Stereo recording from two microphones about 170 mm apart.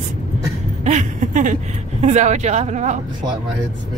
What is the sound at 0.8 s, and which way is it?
Speech, 45° right (ahead or behind).